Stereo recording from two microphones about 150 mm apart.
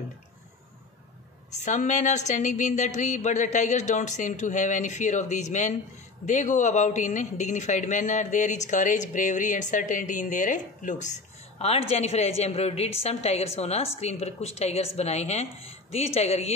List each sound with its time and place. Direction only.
1.5 s a man's voice: 50° left (ahead or behind)